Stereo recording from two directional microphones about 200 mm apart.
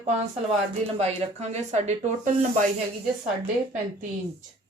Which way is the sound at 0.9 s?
35° right (ahead or behind).